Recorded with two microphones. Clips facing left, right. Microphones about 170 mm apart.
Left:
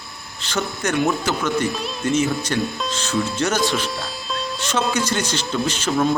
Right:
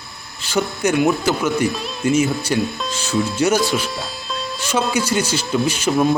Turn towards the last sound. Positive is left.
turn(degrees=-10)  # may be behind; listen again after turning